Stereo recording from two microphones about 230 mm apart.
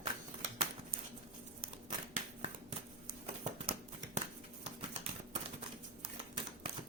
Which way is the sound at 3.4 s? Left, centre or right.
Right.